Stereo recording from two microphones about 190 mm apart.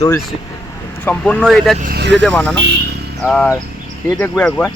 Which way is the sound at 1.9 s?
65° right (ahead or behind).